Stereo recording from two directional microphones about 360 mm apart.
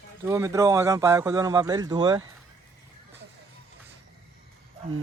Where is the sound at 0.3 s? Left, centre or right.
Centre.